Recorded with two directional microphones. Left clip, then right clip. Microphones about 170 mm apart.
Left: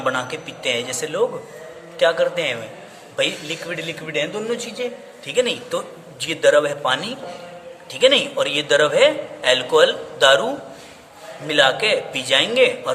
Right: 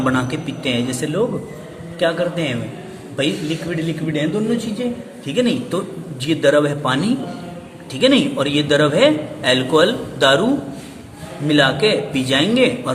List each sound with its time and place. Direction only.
0.0 s a man's voice: 10° left (ahead or behind)